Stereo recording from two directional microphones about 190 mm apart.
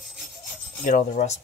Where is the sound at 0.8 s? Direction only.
40° left (ahead or behind).